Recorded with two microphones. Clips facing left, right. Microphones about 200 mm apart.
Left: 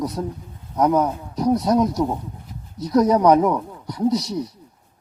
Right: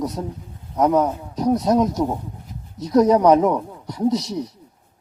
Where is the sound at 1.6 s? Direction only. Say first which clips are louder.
Right 1 dB; 20° right (ahead or behind).